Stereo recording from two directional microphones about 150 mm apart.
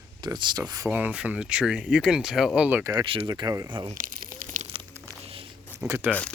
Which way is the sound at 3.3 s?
25° right (ahead or behind).